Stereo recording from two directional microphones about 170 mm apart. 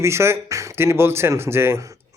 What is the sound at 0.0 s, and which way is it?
Speech, 15° right (ahead or behind).